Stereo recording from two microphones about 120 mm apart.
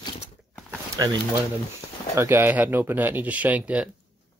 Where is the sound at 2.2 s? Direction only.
20° right (ahead or behind).